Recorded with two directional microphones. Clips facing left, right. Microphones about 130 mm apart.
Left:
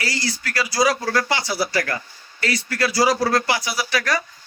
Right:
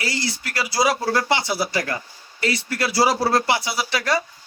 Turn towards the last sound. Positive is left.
turn(degrees=-25)  # may be behind; listen again after turning